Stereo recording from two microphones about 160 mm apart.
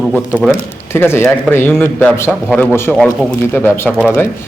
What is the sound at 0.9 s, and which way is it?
Speech, 15° left (ahead or behind).